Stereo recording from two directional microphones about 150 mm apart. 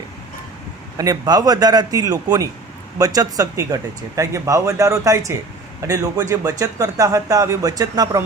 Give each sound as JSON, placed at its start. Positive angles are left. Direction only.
{"t": 0.9, "sound": "speech", "side_deg": -25}